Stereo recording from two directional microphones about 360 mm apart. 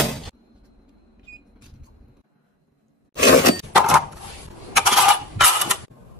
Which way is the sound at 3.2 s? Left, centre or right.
Left.